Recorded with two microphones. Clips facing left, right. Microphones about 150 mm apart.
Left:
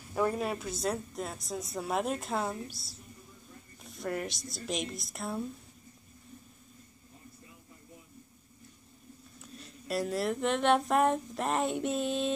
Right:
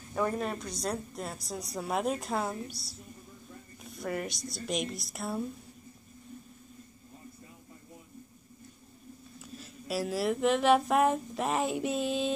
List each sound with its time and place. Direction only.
0.1 s speech: 5° left (ahead or behind)
9.4 s speech: centre (ahead or behind)